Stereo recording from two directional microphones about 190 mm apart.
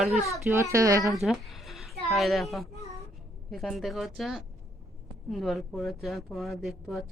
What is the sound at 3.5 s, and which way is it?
A woman's voice, centre (ahead or behind).